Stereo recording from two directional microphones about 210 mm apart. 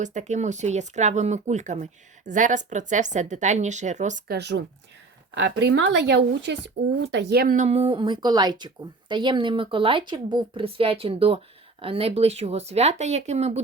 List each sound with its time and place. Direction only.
0.0 s speech: 35° right (ahead or behind)
4.4 s speech: 55° right (ahead or behind)
7.5 s a woman's voice: 30° right (ahead or behind)